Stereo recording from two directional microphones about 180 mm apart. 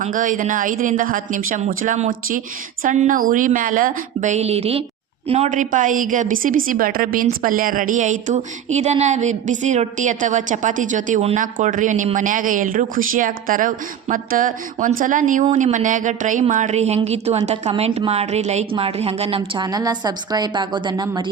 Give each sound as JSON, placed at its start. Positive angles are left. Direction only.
{"t": 0.0, "sound": "speech", "side_deg": -45}
{"t": 19.4, "sound": "a woman's voice", "side_deg": -20}